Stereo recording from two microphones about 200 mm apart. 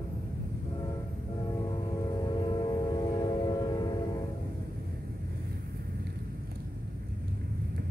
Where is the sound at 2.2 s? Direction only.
20° left (ahead or behind).